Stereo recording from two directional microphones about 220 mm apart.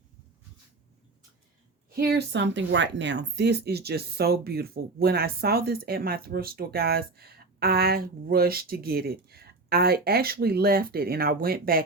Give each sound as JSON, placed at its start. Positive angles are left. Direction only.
{"t": 2.0, "sound": "speech", "side_deg": -50}